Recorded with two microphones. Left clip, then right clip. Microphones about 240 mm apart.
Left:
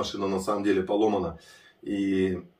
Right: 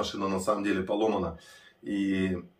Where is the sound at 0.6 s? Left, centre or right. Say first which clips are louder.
Left 4 dB; centre.